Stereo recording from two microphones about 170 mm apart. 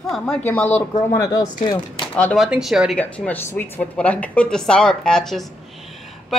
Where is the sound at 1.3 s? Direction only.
25° left (ahead or behind).